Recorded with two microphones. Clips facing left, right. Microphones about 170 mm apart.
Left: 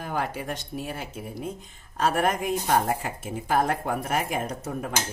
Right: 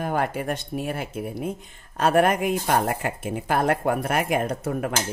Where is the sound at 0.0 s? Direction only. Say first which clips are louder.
Right 5 dB; 55° right (ahead or behind).